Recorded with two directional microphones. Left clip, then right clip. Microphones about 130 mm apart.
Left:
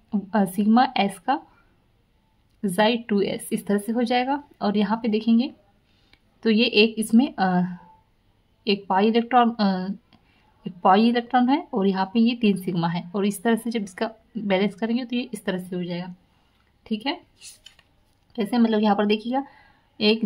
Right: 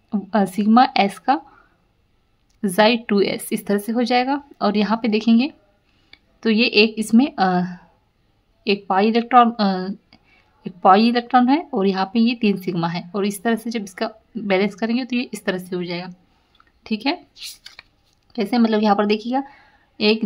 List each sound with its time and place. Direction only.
0.1 s speech: 15° right (ahead or behind)
2.6 s speech: 20° right (ahead or behind)
6.0 s speech: 10° right (ahead or behind)
15.7 s a woman's voice: 30° right (ahead or behind)
18.3 s a woman's voice: 20° right (ahead or behind)